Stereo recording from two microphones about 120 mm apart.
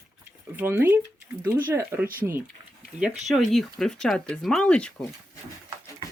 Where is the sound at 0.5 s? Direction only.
15° right (ahead or behind).